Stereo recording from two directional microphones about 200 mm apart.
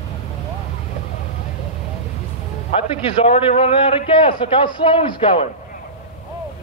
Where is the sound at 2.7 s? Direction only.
30° left (ahead or behind).